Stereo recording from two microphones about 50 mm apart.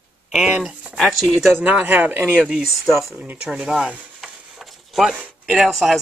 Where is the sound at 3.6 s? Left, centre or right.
Right.